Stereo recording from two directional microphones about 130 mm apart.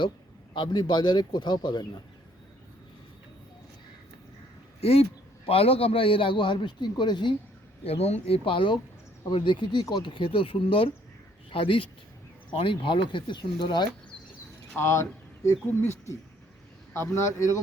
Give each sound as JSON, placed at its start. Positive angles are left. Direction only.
{"t": 0.5, "sound": "a man's voice", "side_deg": 35}
{"t": 4.8, "sound": "a man's voice", "side_deg": 50}
{"t": 7.9, "sound": "a man's voice", "side_deg": 55}
{"t": 14.7, "sound": "speech", "side_deg": 20}